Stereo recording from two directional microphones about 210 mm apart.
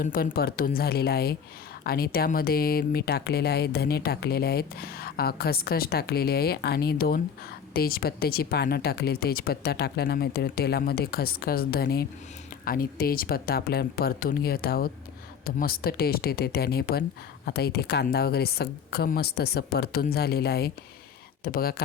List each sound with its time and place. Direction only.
0.0 s speech: 45° left (ahead or behind)